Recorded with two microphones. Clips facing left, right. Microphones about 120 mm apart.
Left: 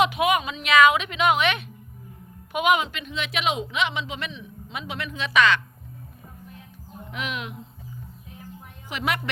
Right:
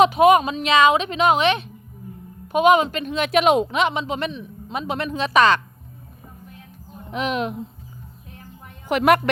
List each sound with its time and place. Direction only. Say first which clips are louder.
0.0 s a woman's voice: right 7 dB; 35° right (ahead or behind)
7.1 s a woman's voice: right 9 dB; 35° right (ahead or behind)
8.9 s a woman's voice: right 11 dB; 55° right (ahead or behind)